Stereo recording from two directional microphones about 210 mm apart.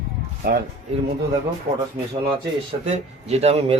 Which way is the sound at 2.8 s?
30° right (ahead or behind).